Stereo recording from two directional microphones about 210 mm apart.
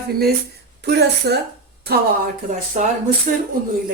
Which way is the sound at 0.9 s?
50° right (ahead or behind).